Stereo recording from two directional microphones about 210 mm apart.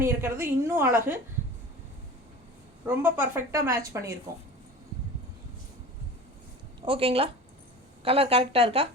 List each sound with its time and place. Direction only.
0.0 s a woman's voice: 10° right (ahead or behind)
2.9 s a woman's voice: 10° right (ahead or behind)
6.8 s a woman's voice: 25° right (ahead or behind)